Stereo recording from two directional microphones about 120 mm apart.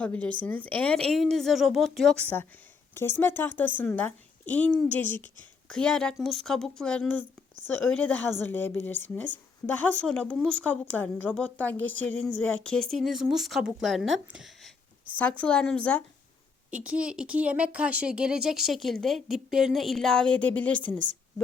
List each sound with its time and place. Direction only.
0.0 s a woman's voice: 10° left (ahead or behind)
2.2 s a woman's voice: 15° left (ahead or behind); by 14.7 s centre (ahead or behind)
15.1 s a woman's voice: 10° left (ahead or behind)
16.7 s speech: 10° right (ahead or behind); by 21.0 s 10° left (ahead or behind)